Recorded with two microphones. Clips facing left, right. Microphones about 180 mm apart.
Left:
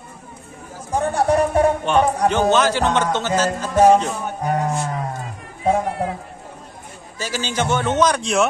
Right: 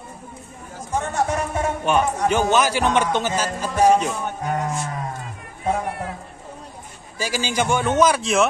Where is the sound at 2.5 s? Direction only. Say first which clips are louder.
Left 1 dB; 10° right (ahead or behind).